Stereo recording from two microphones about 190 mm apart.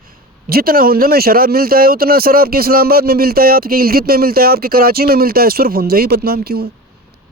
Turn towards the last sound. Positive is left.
turn(degrees=-55)  # may be behind; listen again after turning